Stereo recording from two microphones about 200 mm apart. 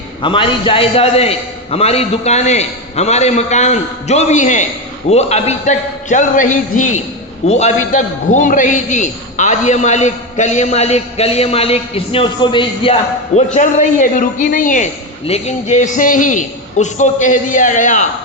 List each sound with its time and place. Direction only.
0.2 s a man's voice: 25° left (ahead or behind)